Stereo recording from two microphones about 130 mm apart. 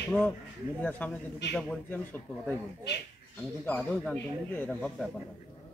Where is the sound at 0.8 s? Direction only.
10° left (ahead or behind).